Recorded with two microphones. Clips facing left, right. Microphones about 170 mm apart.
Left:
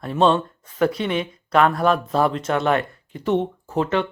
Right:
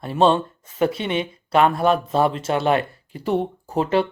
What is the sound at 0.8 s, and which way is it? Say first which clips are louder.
A man's voice: even; 30° right (ahead or behind).